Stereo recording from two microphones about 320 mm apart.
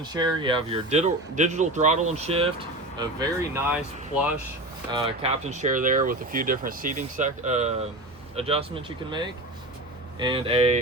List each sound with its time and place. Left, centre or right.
0.1 s speech: centre
4.9 s speech: centre